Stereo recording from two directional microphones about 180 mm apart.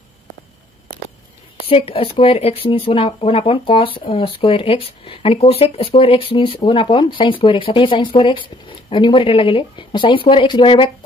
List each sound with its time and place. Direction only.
1.7 s speech: 30° left (ahead or behind)